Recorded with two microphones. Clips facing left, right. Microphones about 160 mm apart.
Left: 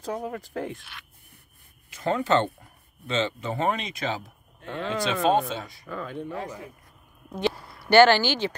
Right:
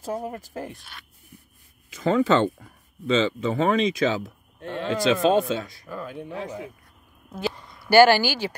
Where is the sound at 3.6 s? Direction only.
90° right.